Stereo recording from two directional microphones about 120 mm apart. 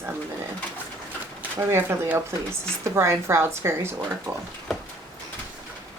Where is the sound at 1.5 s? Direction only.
20° right (ahead or behind).